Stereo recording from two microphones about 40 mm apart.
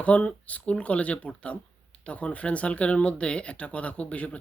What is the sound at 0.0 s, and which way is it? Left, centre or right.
Speech, left.